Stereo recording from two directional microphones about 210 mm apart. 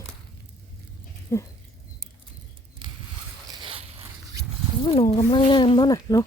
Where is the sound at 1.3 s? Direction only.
15° left (ahead or behind).